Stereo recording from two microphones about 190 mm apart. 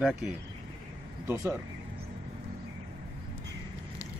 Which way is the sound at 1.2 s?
15° right (ahead or behind).